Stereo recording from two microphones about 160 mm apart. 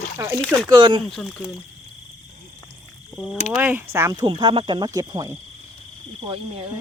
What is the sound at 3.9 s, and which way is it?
Speech, 20° right (ahead or behind).